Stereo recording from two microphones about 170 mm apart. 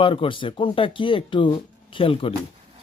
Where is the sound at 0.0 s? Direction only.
30° left (ahead or behind).